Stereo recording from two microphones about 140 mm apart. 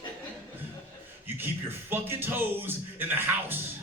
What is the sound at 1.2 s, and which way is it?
A man's voice, 15° right (ahead or behind).